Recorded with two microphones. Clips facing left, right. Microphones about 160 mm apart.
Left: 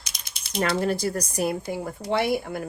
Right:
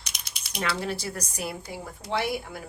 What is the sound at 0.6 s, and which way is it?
A woman's voice, 45° left (ahead or behind).